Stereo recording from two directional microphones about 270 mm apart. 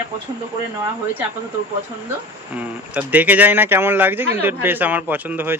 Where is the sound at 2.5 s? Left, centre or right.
Centre.